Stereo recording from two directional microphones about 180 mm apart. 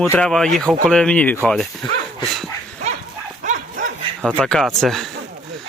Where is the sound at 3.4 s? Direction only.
40° right (ahead or behind).